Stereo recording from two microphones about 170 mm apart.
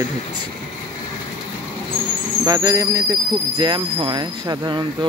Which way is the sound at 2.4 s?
20° right (ahead or behind).